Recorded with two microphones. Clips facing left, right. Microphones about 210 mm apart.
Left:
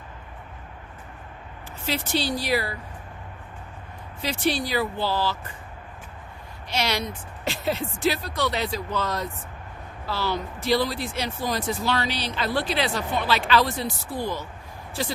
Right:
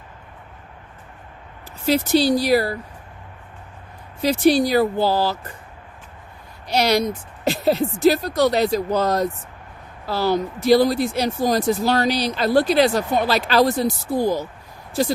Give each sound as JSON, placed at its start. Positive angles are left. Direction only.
{"t": 1.9, "sound": "speech", "side_deg": -40}
{"t": 4.2, "sound": "speech", "side_deg": -40}
{"t": 6.7, "sound": "speech", "side_deg": -40}